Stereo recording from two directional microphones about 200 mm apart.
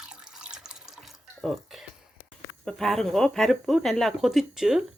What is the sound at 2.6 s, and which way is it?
Speech, centre (ahead or behind).